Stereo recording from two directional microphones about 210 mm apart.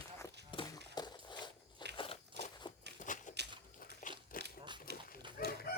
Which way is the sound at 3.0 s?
35° left (ahead or behind).